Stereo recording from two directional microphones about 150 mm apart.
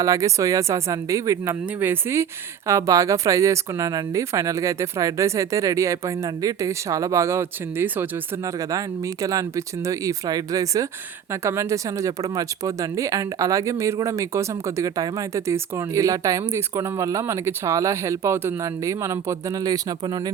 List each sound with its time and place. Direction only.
0.0 s speech: 20° right (ahead or behind)